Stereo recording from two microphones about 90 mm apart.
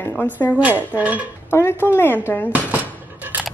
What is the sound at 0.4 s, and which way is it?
Speech, 30° left (ahead or behind).